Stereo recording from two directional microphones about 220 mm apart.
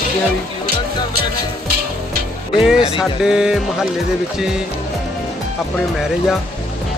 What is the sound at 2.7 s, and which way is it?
Speech, 25° left (ahead or behind).